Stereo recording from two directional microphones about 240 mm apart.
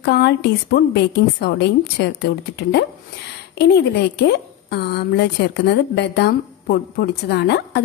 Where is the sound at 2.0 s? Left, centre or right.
Left.